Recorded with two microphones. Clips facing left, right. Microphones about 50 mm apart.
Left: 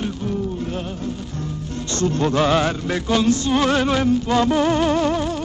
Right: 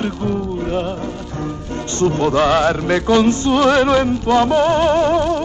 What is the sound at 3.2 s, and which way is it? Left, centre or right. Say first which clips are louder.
Music: right 4 dB; right.